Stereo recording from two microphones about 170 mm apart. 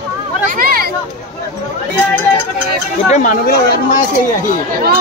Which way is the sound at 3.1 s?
50° left (ahead or behind).